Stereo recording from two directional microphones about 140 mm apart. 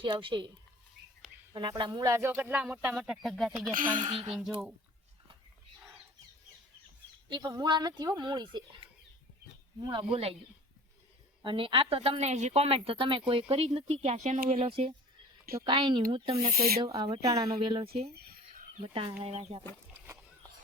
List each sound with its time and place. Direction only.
0.0 s speech: 35° right (ahead or behind)
1.5 s speech: 30° right (ahead or behind)
2.5 s speech: 5° right (ahead or behind)
3.8 s speech: 75° right (ahead or behind)
4.0 s speech: 30° right (ahead or behind)
7.3 s speech: 30° right (ahead or behind)
11.4 s speech: 40° right (ahead or behind); by 14.5 s 60° right (ahead or behind)
14.5 s speech: 45° right (ahead or behind)
16.5 s speech: 90° right
17.0 s speech: 30° right (ahead or behind)
18.1 s a sound: 90° right
18.8 s speech: 40° right (ahead or behind)